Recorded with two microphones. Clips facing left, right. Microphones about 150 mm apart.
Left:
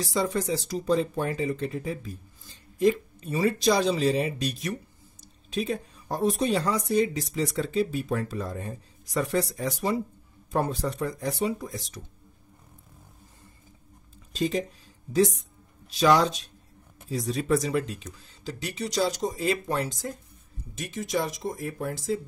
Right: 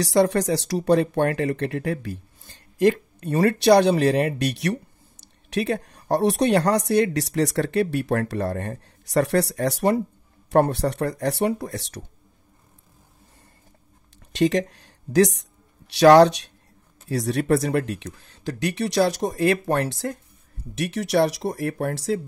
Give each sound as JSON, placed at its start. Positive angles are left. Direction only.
{"t": 0.0, "sound": "a woman's voice", "side_deg": -75}
{"t": 14.3, "sound": "a woman's voice", "side_deg": -80}